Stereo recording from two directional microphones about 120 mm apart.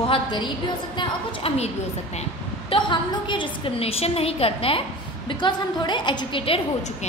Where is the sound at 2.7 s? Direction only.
40° left (ahead or behind).